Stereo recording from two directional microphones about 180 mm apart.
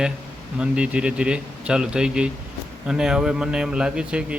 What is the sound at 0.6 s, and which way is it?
A man's voice, 5° right (ahead or behind).